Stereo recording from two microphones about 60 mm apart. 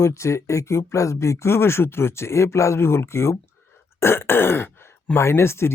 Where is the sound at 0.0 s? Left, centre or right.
Left.